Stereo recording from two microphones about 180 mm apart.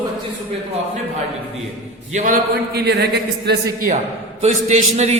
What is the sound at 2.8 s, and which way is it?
A woman's voice, 65° right (ahead or behind).